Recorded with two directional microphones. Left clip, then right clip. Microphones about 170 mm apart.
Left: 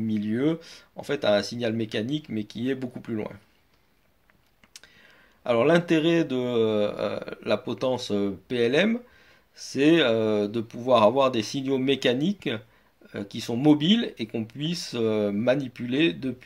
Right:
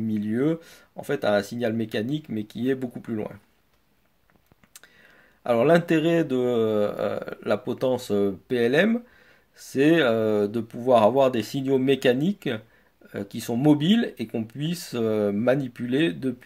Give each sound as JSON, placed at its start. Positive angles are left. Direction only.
{"t": 0.0, "sound": "speech", "side_deg": -35}
{"t": 4.7, "sound": "speech", "side_deg": -40}